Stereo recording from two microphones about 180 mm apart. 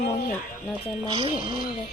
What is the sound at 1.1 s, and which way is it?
Speech, 25° right (ahead or behind).